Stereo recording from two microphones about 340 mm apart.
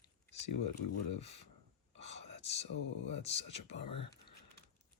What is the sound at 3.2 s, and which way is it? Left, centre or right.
Speech, centre.